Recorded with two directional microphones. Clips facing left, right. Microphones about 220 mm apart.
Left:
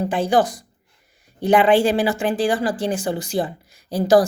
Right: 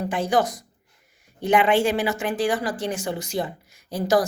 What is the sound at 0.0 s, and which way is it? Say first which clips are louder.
Speech: left 4 dB; 30° left (ahead or behind).